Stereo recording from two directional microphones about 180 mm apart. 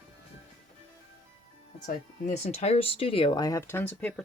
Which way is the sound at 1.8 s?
40° left (ahead or behind).